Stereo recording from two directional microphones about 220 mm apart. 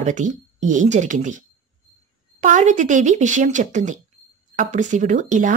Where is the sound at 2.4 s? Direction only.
35° right (ahead or behind).